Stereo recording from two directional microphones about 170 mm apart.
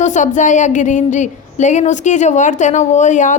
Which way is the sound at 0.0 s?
45° left (ahead or behind).